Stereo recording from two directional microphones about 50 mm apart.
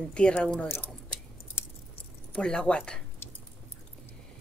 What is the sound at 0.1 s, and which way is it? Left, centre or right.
Speech, centre.